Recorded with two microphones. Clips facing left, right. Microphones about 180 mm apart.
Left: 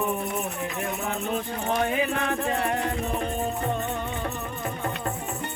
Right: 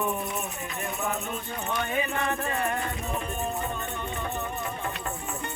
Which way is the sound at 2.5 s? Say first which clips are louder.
Left 3 dB; 90° left.